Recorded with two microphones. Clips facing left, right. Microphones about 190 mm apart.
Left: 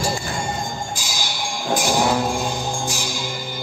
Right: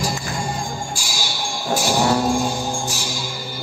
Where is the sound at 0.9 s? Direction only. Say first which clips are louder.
Even; 20° left (ahead or behind).